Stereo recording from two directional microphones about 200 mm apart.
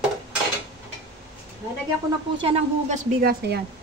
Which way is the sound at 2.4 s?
30° right (ahead or behind).